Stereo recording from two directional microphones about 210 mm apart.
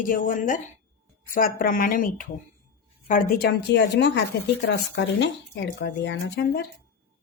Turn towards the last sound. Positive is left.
turn(degrees=55)  # may be behind; listen again after turning